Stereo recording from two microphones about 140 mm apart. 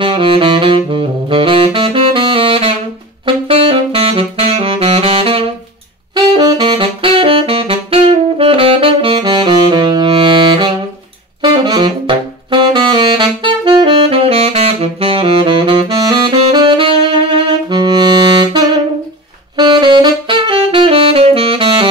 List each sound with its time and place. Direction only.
0.0 s saxophone: 35° right (ahead or behind)
6.1 s saxophone: 30° right (ahead or behind)